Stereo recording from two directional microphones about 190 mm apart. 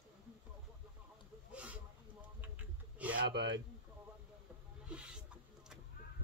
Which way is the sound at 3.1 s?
65° right (ahead or behind).